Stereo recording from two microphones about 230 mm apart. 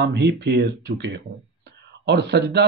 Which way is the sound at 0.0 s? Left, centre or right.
Right.